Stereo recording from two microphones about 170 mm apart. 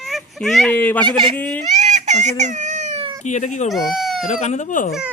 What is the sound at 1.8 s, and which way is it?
Baby cry, 45° right (ahead or behind).